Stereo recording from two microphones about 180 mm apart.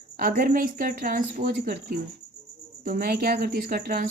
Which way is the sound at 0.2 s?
50° right (ahead or behind).